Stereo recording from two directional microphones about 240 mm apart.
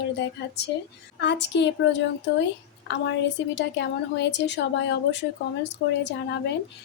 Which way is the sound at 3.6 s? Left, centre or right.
Left.